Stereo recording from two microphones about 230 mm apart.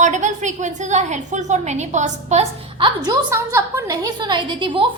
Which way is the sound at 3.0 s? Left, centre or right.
Centre.